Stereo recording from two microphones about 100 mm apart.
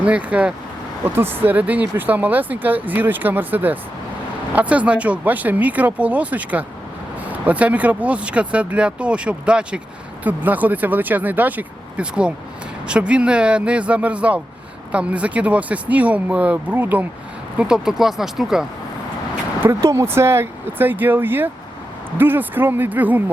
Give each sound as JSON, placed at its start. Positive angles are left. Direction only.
{"t": 0.0, "sound": "speech", "side_deg": -15}
{"t": 17.6, "sound": "speech", "side_deg": -5}
{"t": 19.6, "sound": "speech", "side_deg": -30}